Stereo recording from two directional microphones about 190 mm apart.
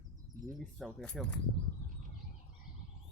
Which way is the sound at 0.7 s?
Centre (ahead or behind).